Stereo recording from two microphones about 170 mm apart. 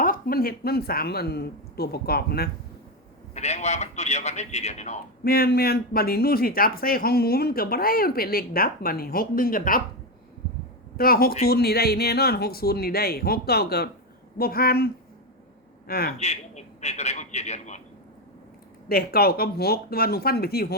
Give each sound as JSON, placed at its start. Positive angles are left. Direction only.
{"t": 0.0, "sound": "speech", "side_deg": 60}
{"t": 3.3, "sound": "a man's voice", "side_deg": 40}
{"t": 5.2, "sound": "speech", "side_deg": 65}
{"t": 10.9, "sound": "speech", "side_deg": 60}
{"t": 15.9, "sound": "speech", "side_deg": 65}
{"t": 16.1, "sound": "a man's voice", "side_deg": 40}
{"t": 18.9, "sound": "speech", "side_deg": 65}